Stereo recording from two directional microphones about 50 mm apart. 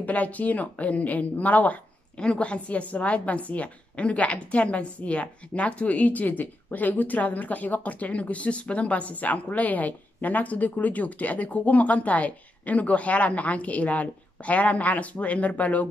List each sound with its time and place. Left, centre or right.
0.0 s a woman's voice: left